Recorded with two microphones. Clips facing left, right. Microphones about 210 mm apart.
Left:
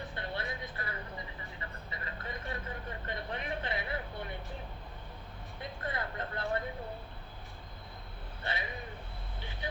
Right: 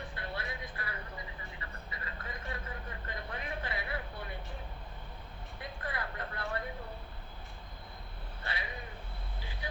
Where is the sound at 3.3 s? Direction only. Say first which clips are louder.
Left 2 dB; 25° left (ahead or behind).